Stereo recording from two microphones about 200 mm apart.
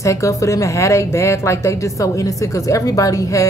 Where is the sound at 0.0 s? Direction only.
15° left (ahead or behind).